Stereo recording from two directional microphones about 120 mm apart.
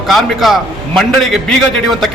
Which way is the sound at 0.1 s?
Centre (ahead or behind).